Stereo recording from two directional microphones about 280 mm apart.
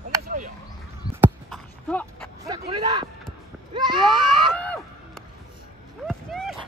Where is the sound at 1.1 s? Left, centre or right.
Centre.